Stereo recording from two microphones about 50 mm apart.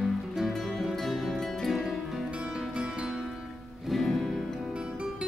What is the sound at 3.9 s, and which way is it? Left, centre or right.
Music, centre.